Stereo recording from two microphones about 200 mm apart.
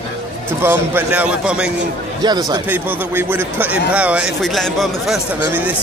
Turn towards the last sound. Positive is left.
turn(degrees=-10)  # may be behind; listen again after turning